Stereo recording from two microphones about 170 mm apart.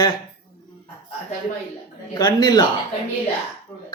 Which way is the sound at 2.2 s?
25° left (ahead or behind).